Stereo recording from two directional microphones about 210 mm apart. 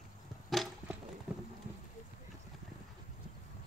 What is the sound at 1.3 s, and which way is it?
Clip-clop, 5° right (ahead or behind).